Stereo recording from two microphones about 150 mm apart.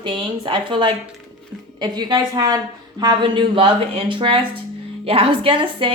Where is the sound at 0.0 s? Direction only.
35° right (ahead or behind).